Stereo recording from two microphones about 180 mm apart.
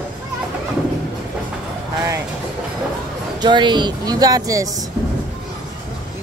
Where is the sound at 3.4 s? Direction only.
25° right (ahead or behind).